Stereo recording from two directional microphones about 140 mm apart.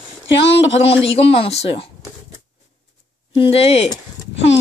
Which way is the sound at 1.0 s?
45° left (ahead or behind).